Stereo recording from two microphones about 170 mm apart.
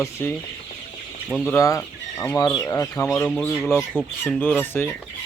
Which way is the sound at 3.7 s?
Centre (ahead or behind).